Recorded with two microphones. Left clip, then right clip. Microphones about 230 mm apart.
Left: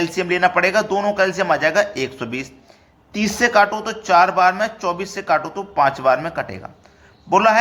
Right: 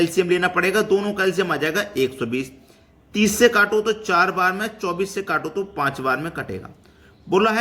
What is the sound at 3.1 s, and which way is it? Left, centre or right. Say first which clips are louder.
Speech: right 2 dB; right.